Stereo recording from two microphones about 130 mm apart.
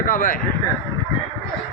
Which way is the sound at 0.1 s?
90° left.